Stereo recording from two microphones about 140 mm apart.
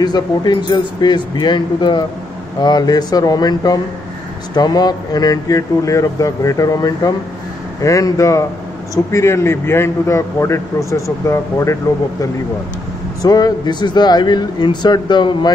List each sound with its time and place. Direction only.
0.0 s a man's voice: 30° left (ahead or behind)